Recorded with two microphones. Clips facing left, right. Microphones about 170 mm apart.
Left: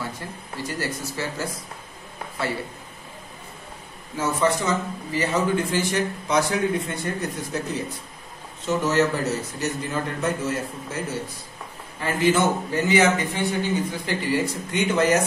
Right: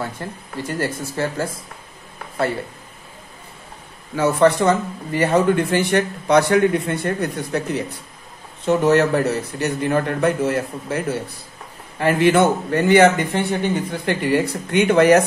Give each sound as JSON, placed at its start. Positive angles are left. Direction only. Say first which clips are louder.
{"t": 0.2, "sound": "speech", "louder": "right 4 dB", "side_deg": -55}
{"t": 4.2, "sound": "speech", "louder": "right 7 dB", "side_deg": -65}